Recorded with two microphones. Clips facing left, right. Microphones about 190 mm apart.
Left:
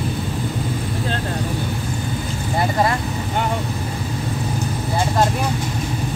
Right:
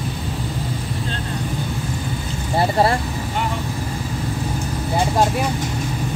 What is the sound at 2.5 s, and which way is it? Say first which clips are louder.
Vehicle: right 2 dB; 30° right (ahead or behind).